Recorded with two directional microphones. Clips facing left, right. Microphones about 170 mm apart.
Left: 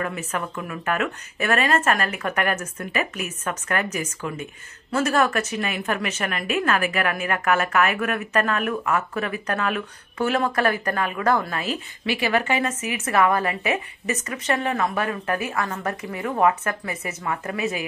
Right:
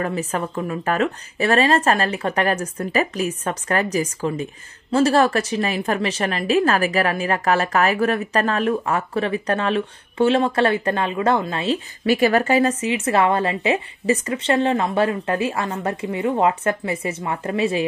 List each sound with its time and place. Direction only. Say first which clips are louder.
0.0 s speech: right 4 dB; 35° right (ahead or behind)
12.1 s a woman's voice: right 6 dB; 40° right (ahead or behind)